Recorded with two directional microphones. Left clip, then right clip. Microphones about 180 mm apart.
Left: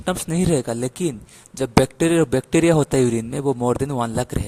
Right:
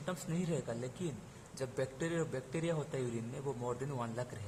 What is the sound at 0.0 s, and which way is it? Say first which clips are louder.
A man's voice: left 18 dB; 60° left (ahead or behind).